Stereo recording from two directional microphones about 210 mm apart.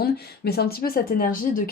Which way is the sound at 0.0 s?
50° left (ahead or behind).